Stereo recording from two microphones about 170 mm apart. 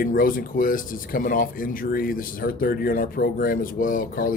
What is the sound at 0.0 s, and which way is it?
Speech, 55° left (ahead or behind).